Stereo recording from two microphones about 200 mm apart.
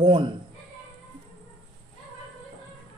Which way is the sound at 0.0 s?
25° right (ahead or behind).